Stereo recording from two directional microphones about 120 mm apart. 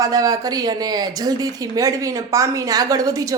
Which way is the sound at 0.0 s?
30° right (ahead or behind).